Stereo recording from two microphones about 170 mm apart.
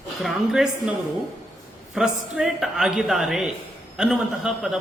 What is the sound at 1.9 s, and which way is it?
A man's voice, 5° right (ahead or behind).